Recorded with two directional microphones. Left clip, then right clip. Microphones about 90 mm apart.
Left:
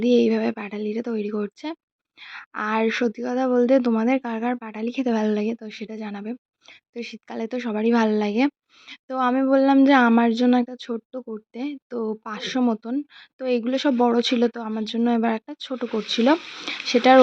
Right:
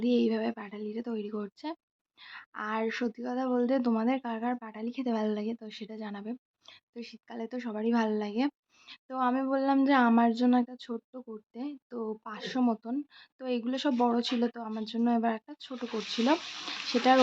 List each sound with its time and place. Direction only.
0.0 s speech: 35° left (ahead or behind)
2.2 s speech: 40° left (ahead or behind)
5.5 s speech: 20° left (ahead or behind)
6.9 s speech: 40° left (ahead or behind)
8.9 s speech: 35° left (ahead or behind)